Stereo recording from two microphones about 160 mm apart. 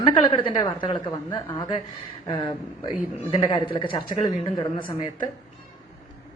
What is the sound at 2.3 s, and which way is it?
A woman's voice, 30° left (ahead or behind).